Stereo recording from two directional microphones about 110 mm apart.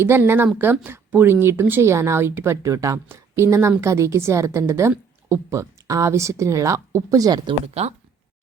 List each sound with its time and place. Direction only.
0.0 s speech: 20° right (ahead or behind); by 7.5 s 40° right (ahead or behind)
7.7 s speech: 80° right